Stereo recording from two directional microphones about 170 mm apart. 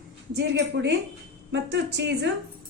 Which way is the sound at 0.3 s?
85° right.